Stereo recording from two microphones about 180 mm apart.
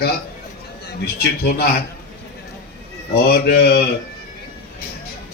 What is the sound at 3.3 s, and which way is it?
Speech, 60° left (ahead or behind).